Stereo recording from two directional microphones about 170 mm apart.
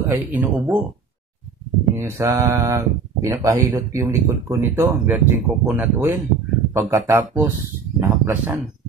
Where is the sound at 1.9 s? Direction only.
15° right (ahead or behind).